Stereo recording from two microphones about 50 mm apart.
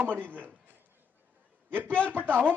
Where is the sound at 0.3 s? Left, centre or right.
Right.